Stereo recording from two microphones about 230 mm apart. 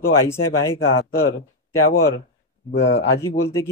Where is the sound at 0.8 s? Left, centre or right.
Left.